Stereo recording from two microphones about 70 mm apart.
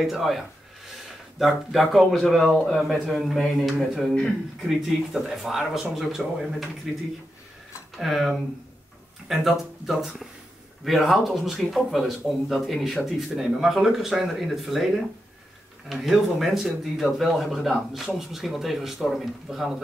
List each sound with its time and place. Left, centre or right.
0.0 s speech: centre
8.0 s speech: centre